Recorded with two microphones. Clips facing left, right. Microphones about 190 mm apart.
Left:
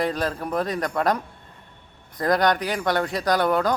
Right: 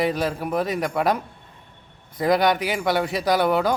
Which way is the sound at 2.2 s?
5° right (ahead or behind).